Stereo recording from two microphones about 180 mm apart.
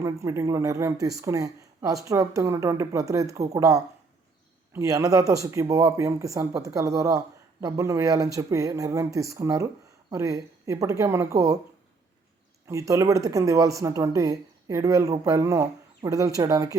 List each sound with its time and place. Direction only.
0.0 s speech: 15° right (ahead or behind)
12.6 s speech: 15° right (ahead or behind)